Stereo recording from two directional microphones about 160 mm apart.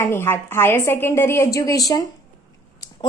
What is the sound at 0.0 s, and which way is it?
A woman's voice, 15° left (ahead or behind).